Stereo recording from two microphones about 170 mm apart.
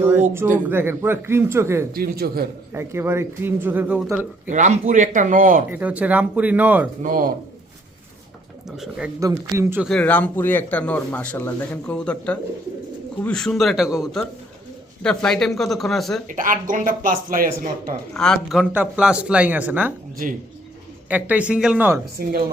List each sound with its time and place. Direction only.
0.0 s a sound: 10° right (ahead or behind)
0.7 s speech: 15° right (ahead or behind)
1.9 s a man's voice: 65° right (ahead or behind)
2.7 s speech: 15° right (ahead or behind)
4.4 s speech: 45° right (ahead or behind)
5.7 s speech: 10° right (ahead or behind)
7.0 s speech: 55° right (ahead or behind)
8.6 s speech: centre (ahead or behind)
9.2 s speech: 20° right (ahead or behind)
9.8 s speech: 5° left (ahead or behind)
16.2 s speech: 50° right (ahead or behind)
18.1 s speech: 5° left (ahead or behind)
21.1 s speech: 10° right (ahead or behind)